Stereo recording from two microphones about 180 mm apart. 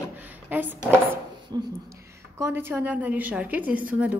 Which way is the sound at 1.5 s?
25° right (ahead or behind).